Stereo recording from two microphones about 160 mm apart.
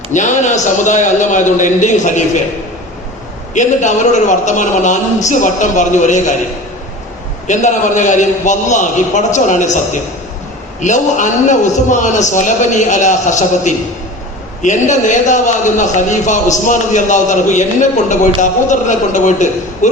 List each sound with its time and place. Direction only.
0.1 s a man's voice: 50° left (ahead or behind)
3.5 s a man's voice: 50° left (ahead or behind)
7.4 s a man's voice: 50° left (ahead or behind)